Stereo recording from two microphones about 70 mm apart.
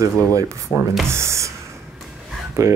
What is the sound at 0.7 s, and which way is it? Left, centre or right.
Speech, left.